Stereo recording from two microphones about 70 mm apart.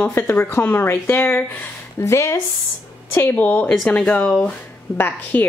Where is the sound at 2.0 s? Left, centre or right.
Left.